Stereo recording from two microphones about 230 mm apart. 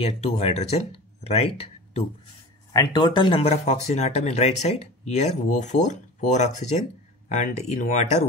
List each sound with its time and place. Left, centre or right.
0.0 s speech: left